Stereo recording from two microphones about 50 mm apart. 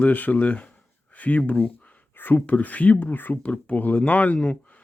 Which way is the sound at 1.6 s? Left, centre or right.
Left.